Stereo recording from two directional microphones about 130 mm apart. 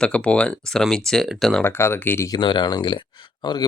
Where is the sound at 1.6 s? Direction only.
15° left (ahead or behind).